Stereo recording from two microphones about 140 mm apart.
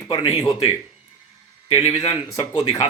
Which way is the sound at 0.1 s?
25° left (ahead or behind).